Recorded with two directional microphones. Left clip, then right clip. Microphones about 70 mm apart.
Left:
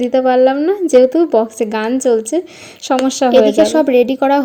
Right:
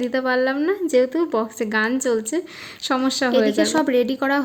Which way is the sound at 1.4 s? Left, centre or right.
Left.